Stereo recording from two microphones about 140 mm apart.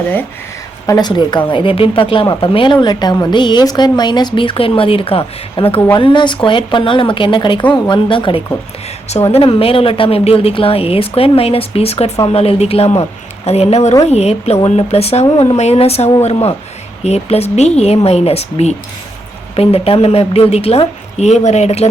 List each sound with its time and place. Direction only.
0.9 s a woman's voice: 30° left (ahead or behind); by 21.8 s 50° left (ahead or behind)